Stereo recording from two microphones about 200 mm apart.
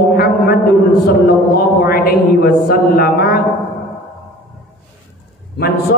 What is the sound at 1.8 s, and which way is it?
A man's voice, 50° left (ahead or behind).